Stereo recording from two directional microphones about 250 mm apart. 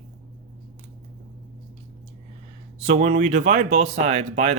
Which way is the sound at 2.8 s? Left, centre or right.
Right.